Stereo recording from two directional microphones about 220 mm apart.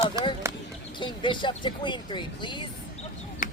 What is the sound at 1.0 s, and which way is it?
Speech, 20° left (ahead or behind).